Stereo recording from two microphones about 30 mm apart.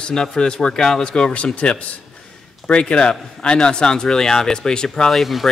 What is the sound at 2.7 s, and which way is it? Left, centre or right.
A man's voice, left.